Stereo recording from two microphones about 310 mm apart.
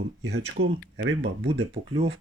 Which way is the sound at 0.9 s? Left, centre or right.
Right.